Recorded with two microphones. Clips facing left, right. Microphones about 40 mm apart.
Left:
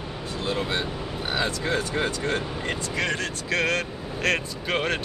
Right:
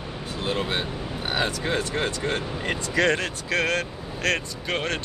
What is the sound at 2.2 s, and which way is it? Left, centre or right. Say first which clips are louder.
Speech: even; centre.